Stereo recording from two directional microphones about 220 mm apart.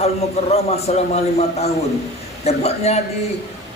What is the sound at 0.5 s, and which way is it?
A man's voice, 30° left (ahead or behind).